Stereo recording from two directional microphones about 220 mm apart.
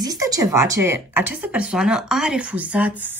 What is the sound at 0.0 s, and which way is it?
A woman's voice, 15° right (ahead or behind).